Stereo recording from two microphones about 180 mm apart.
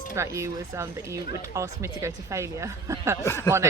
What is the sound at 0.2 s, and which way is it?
Speech, 15° right (ahead or behind).